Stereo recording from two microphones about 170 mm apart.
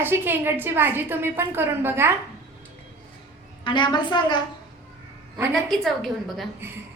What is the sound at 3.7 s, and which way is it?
Speech, 25° left (ahead or behind).